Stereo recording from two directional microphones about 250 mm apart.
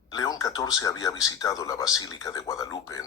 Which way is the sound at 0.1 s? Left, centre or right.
Centre.